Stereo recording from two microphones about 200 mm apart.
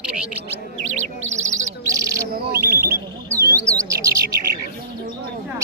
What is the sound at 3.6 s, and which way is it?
Bird, 15° right (ahead or behind).